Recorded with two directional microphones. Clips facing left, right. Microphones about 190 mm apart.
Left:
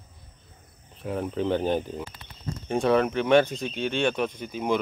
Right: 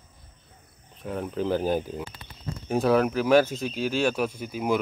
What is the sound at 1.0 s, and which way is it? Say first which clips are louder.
Speech: left 1 dB; centre (ahead or behind).